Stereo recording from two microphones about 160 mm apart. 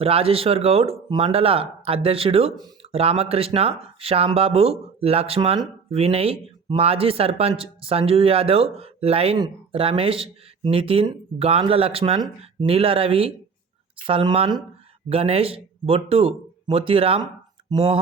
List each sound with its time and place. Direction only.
0.0 s speech: 35° right (ahead or behind)